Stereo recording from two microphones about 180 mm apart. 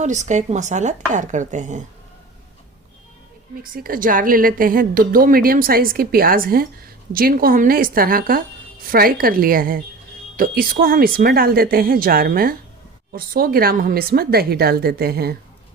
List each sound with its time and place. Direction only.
0.0 s speech: 40° right (ahead or behind)
3.6 s a woman's voice: 50° right (ahead or behind)